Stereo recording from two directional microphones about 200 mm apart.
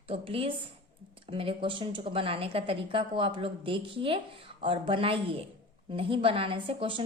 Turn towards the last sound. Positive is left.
turn(degrees=-25)  # may be behind; listen again after turning